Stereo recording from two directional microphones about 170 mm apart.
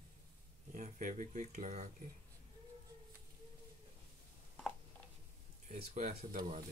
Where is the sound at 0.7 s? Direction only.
45° right (ahead or behind).